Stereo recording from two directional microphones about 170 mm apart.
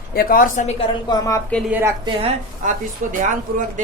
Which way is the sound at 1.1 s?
20° left (ahead or behind).